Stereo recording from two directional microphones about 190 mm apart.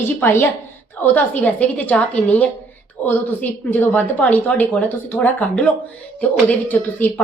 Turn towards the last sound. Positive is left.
turn(degrees=10)  # may be behind; listen again after turning